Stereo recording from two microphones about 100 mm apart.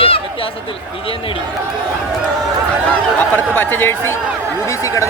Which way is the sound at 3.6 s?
20° left (ahead or behind).